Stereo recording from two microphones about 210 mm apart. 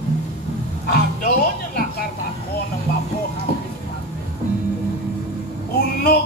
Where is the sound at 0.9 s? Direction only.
45° left (ahead or behind).